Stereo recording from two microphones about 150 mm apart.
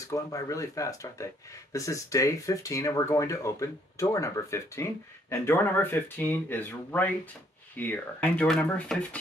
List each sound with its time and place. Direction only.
0.0 s speech: 20° left (ahead or behind)